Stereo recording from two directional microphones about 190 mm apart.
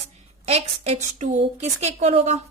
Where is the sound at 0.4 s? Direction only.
35° right (ahead or behind).